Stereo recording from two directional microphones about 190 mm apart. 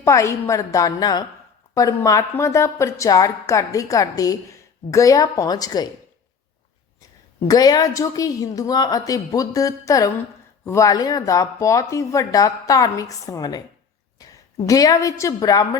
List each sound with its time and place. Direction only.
0.0 s a woman's voice: 15° left (ahead or behind)
7.3 s a woman's voice: 20° left (ahead or behind)
14.2 s a sound: 20° left (ahead or behind)
14.7 s speech: 20° left (ahead or behind)